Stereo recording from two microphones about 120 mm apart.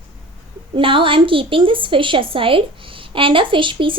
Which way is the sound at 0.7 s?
45° right (ahead or behind).